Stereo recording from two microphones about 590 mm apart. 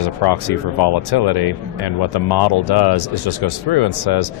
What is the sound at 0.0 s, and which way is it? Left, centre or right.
A man's voice, left.